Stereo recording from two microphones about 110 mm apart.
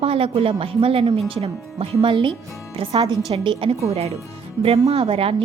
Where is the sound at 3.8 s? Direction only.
75° right (ahead or behind).